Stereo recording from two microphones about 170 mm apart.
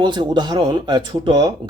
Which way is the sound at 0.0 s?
25° right (ahead or behind).